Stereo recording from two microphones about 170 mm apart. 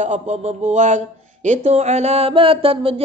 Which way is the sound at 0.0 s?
45° right (ahead or behind).